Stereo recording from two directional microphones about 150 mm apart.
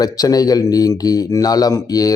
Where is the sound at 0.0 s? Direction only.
25° left (ahead or behind).